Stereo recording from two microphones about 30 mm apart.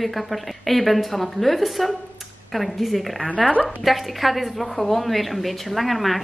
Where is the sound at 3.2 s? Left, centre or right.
Left.